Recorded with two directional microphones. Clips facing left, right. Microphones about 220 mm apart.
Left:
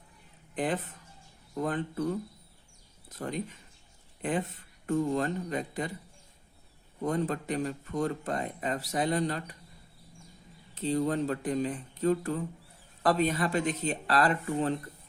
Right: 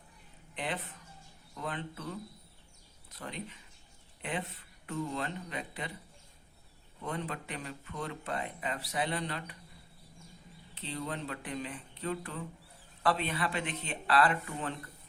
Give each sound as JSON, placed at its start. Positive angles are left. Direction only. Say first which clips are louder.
{"t": 0.5, "sound": "speech", "louder": "left 7 dB", "side_deg": 45}
{"t": 7.0, "sound": "speech", "louder": "left 8 dB", "side_deg": 40}
{"t": 10.8, "sound": "speech", "louder": "left 11 dB", "side_deg": 40}